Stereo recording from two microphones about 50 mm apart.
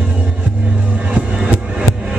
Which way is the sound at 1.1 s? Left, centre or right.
Right.